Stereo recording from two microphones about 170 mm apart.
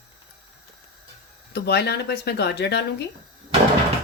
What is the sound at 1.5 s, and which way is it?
Speech, 75° left (ahead or behind).